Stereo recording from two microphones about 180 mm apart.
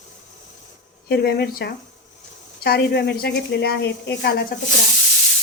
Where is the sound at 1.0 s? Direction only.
60° left (ahead or behind).